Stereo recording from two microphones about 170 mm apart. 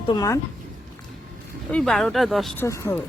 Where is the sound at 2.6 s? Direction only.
15° left (ahead or behind).